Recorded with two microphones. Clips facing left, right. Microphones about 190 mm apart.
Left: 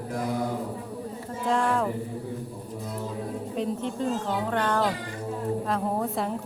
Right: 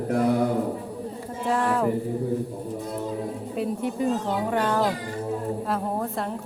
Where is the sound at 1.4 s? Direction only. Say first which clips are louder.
Right 1 dB; 5° right (ahead or behind).